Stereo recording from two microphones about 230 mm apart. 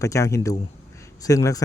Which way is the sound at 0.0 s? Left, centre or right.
Centre.